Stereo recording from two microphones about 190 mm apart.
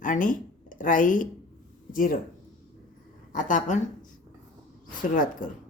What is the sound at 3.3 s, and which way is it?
Speech, 40° left (ahead or behind).